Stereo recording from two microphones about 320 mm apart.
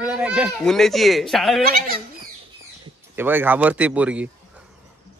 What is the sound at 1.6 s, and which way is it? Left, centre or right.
Speech, right.